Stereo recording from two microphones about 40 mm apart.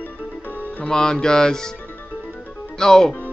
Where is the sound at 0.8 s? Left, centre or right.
Centre.